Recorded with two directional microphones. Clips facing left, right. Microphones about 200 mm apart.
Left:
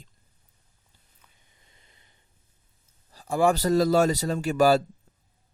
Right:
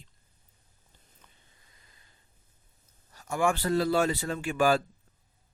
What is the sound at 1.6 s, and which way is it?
Snort, 25° left (ahead or behind).